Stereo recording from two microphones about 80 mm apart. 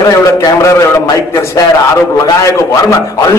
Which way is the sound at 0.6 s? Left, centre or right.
Left.